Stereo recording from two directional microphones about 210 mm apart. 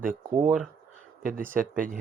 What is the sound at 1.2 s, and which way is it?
Speech, 40° right (ahead or behind).